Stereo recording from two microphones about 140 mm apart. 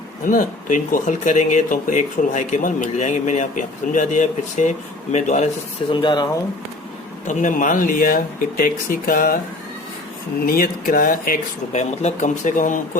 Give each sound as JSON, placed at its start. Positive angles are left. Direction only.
{"t": 0.3, "sound": "speech", "side_deg": 75}
{"t": 5.9, "sound": "speech", "side_deg": 35}
{"t": 7.3, "sound": "speech", "side_deg": 65}
{"t": 10.4, "sound": "speech", "side_deg": 90}
{"t": 11.7, "sound": "speech", "side_deg": 55}